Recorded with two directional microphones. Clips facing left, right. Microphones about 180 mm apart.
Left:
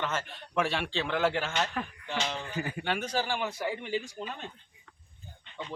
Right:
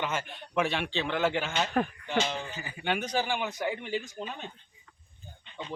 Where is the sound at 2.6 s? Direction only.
55° left (ahead or behind).